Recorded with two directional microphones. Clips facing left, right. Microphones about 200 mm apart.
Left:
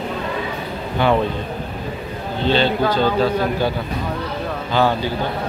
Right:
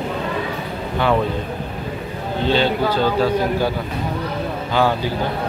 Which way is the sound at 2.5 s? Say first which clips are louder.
Left 1 dB; 10° right (ahead or behind).